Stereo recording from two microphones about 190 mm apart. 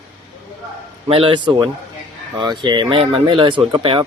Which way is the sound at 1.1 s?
30° right (ahead or behind).